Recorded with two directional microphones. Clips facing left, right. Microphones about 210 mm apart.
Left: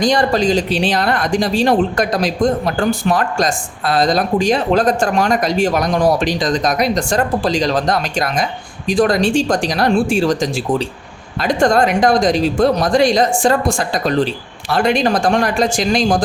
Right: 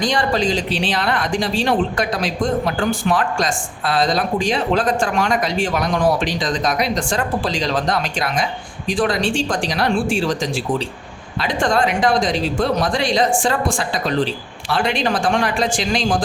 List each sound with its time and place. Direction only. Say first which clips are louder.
0.0 s speech: left 4 dB; 40° left (ahead or behind)